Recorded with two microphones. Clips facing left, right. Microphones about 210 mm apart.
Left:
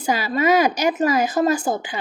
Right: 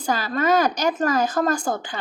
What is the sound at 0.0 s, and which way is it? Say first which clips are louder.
Speech: left 2 dB; 10° left (ahead or behind).